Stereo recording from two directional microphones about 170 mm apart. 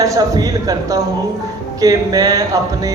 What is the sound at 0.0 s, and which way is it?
A man's voice, 20° right (ahead or behind).